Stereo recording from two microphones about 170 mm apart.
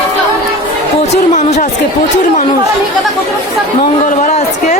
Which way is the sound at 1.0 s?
40° left (ahead or behind).